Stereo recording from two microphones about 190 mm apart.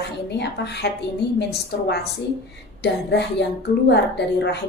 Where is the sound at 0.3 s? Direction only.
65° left (ahead or behind).